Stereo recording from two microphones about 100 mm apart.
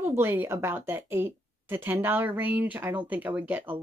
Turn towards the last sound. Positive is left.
turn(degrees=-20)  # may be behind; listen again after turning